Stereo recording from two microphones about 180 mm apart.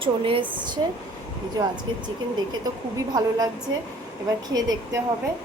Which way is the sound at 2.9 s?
20° right (ahead or behind).